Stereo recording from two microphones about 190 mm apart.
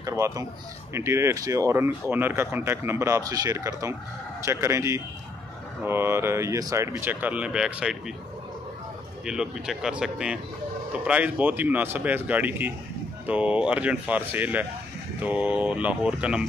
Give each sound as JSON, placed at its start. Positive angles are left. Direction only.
{"t": 0.0, "sound": "a man's voice", "side_deg": -15}
{"t": 9.2, "sound": "speech", "side_deg": -5}